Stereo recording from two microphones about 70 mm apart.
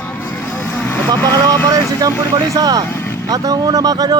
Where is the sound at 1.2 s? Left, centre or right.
Left.